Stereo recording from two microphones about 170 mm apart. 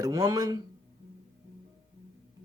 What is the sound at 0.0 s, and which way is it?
Speech, 20° right (ahead or behind).